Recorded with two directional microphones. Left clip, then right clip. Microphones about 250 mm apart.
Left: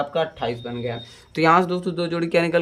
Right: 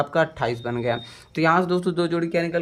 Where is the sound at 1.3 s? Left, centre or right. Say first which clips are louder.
Left 2 dB; centre.